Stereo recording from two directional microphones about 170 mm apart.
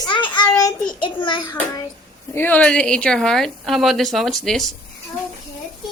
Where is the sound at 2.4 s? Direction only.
10° left (ahead or behind).